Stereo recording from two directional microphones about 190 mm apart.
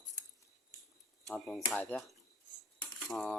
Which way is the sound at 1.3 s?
5° left (ahead or behind).